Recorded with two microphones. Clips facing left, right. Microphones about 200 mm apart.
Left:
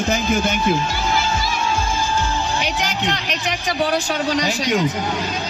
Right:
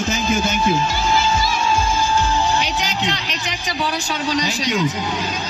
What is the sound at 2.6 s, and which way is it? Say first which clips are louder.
A man's voice: even; 50° left (ahead or behind).